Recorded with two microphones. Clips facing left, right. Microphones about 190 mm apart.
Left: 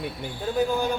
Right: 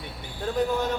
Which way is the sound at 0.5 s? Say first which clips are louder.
Left 1 dB; 10° left (ahead or behind).